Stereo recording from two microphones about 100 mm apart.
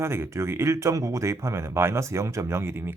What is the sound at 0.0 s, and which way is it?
Speech, 25° right (ahead or behind).